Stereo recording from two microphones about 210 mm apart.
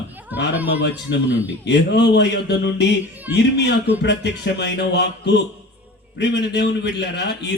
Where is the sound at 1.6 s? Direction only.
55° left (ahead or behind).